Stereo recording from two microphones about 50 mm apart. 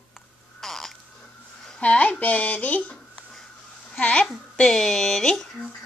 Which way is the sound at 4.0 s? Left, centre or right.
Left.